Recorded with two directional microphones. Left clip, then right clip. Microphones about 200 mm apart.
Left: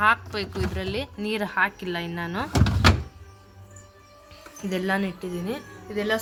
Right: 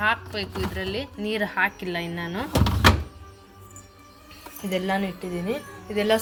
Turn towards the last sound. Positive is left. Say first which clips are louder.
# right 4 dB
turn(degrees=-10)  # may be behind; listen again after turning